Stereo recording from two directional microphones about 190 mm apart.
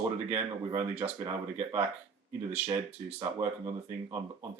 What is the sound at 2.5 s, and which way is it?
Speech, 35° right (ahead or behind).